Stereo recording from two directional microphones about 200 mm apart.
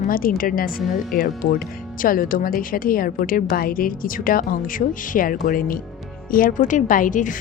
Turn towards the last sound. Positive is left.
turn(degrees=40)  # may be behind; listen again after turning